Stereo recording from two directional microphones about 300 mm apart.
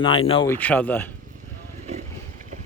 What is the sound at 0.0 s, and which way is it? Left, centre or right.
A man's voice, centre.